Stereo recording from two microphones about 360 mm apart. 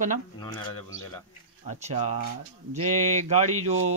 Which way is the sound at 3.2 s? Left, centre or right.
Centre.